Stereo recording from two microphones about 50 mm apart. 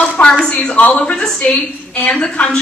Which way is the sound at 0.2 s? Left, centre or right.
Left.